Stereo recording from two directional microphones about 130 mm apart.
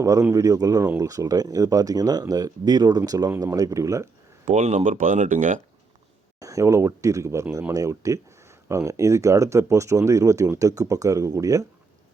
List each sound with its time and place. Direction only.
0.0 s speech: 25° right (ahead or behind)
4.4 s speech: 65° right (ahead or behind)
6.4 s speech: 25° right (ahead or behind)